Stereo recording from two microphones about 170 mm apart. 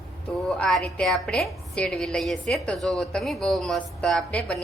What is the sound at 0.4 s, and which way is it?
A woman's voice, 5° left (ahead or behind).